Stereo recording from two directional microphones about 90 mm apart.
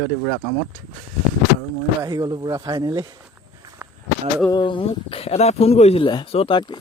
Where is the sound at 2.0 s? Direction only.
50° right (ahead or behind).